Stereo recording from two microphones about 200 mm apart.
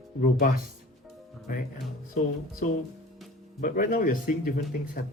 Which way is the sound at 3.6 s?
40° left (ahead or behind).